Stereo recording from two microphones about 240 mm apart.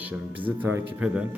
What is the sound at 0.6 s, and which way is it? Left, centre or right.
Speech, centre.